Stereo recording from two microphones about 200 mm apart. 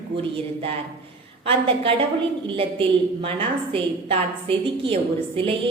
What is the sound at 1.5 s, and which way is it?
A woman's voice, 25° right (ahead or behind).